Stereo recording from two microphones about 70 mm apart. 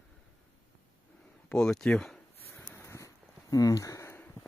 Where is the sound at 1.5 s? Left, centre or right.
Centre.